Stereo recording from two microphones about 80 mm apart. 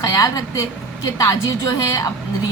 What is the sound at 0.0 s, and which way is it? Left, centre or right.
A man's voice, left.